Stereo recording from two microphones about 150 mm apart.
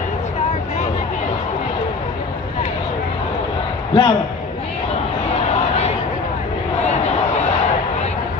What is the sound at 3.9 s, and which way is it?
Speech, 30° left (ahead or behind).